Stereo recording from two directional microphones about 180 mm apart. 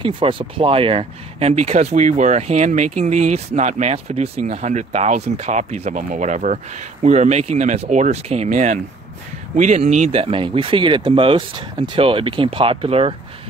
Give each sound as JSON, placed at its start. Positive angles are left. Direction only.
{"t": 0.0, "sound": "speech", "side_deg": -30}